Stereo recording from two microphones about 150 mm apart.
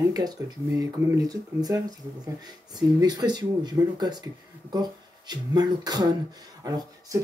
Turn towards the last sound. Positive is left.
turn(degrees=-25)  # may be behind; listen again after turning